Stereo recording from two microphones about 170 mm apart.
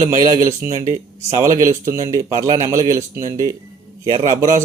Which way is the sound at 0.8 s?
50° right (ahead or behind).